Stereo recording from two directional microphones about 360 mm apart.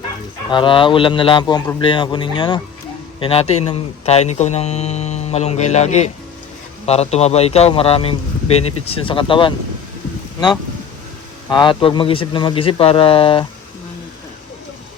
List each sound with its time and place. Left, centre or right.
0.5 s a man's voice: centre
11.4 s a man's voice: centre